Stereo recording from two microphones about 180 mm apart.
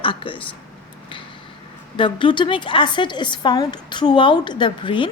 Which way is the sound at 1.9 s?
25° left (ahead or behind).